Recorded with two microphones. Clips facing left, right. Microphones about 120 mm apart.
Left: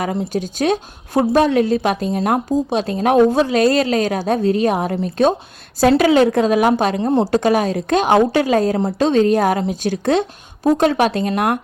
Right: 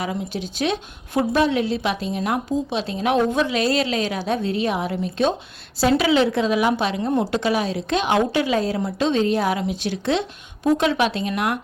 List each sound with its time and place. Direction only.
0.0 s a woman's voice: 45° left (ahead or behind)
7.1 s a woman's voice: 30° left (ahead or behind)
7.3 s a woman's voice: 45° left (ahead or behind)